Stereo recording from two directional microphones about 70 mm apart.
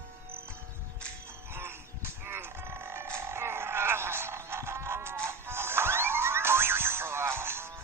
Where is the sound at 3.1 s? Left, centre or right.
Right.